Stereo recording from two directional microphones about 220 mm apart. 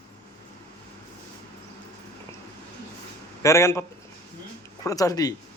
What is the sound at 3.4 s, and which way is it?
Speech, 15° left (ahead or behind).